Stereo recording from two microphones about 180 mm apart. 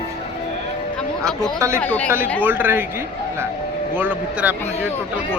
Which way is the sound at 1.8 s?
5° left (ahead or behind).